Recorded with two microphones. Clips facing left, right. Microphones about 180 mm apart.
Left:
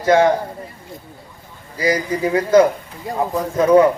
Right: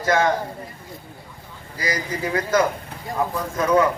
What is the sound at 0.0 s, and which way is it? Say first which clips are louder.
Speech: left 6 dB; 30° left (ahead or behind).